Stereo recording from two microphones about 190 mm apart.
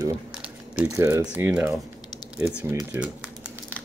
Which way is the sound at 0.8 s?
15° right (ahead or behind).